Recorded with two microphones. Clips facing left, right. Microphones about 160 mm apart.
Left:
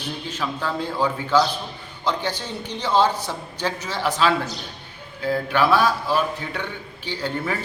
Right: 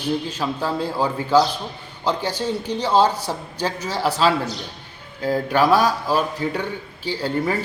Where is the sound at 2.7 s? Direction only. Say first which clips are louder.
Right 1 dB; 35° right (ahead or behind).